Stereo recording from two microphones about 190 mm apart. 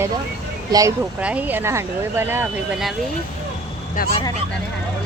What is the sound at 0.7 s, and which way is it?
Speech, 15° right (ahead or behind).